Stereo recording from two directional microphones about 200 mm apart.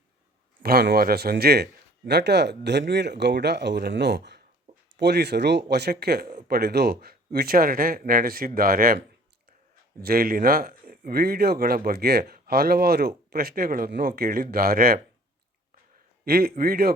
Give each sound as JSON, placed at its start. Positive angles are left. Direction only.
{"t": 0.6, "sound": "speech", "side_deg": -50}
{"t": 10.0, "sound": "speech", "side_deg": -45}
{"t": 16.2, "sound": "speech", "side_deg": -50}